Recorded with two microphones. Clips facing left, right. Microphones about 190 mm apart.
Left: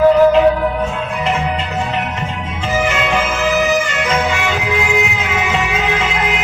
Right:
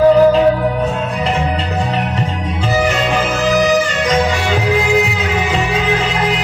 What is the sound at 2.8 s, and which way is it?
Music, 35° right (ahead or behind).